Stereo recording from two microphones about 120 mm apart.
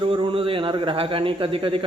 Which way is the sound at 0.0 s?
45° right (ahead or behind).